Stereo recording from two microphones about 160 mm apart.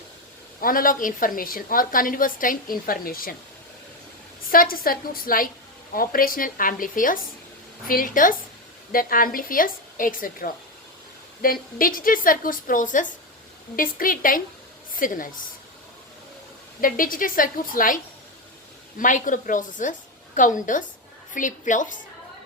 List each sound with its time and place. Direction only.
0.6 s a woman's voice: 60° left (ahead or behind)
4.4 s a woman's voice: 65° left (ahead or behind)
16.8 s a woman's voice: 60° left (ahead or behind)